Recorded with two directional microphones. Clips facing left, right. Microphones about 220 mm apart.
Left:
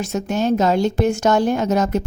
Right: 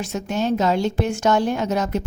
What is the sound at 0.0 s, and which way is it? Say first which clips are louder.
Speech: left 3 dB; 45° left (ahead or behind).